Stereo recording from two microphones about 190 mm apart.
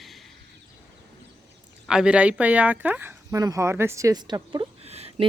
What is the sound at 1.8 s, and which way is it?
Speech, 5° right (ahead or behind).